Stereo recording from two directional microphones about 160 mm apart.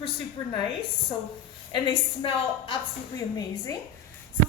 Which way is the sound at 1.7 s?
30° left (ahead or behind).